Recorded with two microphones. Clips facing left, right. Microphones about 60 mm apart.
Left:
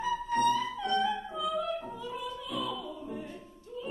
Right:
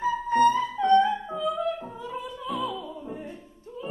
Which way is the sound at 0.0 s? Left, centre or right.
Right.